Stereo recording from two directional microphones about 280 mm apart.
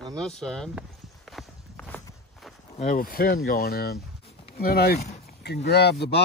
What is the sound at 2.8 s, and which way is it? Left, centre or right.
Speech, left.